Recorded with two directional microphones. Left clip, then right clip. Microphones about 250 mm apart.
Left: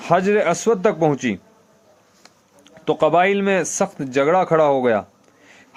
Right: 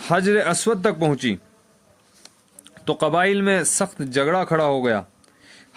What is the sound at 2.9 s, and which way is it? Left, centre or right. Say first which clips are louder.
A man's voice: left 3 dB; right.